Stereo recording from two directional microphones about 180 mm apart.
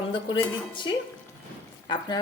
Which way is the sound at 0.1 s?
25° left (ahead or behind).